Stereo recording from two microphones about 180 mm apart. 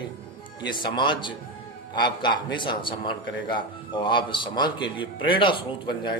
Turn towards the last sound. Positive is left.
turn(degrees=25)  # may be behind; listen again after turning